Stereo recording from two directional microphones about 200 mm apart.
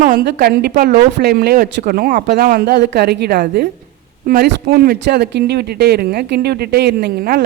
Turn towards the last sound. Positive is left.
turn(degrees=-50)  # may be behind; listen again after turning